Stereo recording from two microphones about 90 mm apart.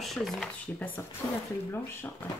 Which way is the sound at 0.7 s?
20° left (ahead or behind).